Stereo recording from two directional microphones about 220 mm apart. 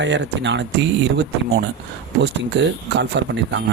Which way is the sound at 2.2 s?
55° right (ahead or behind).